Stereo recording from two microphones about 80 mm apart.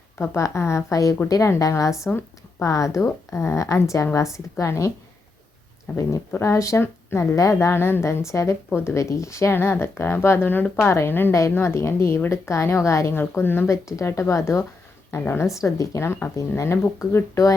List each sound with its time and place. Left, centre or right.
0.2 s a woman's voice: left
6.3 s a woman's voice: left
7.3 s a woman's voice: left